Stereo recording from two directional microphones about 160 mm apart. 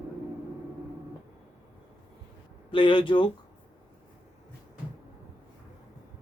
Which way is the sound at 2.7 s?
30° left (ahead or behind).